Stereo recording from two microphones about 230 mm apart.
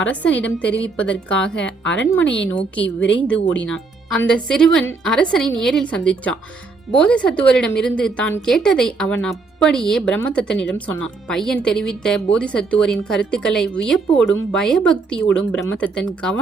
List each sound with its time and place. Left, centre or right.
0.0 s a woman's voice: centre
1.8 s a woman's voice: left
2.5 s speech: centre
2.8 s a woman's voice: left
3.7 s speech: centre